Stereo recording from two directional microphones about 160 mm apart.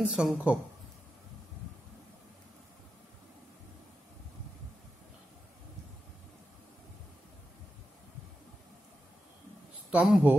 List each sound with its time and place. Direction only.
0.0 s a woman's voice: 5° right (ahead or behind)
9.8 s speech: 10° right (ahead or behind)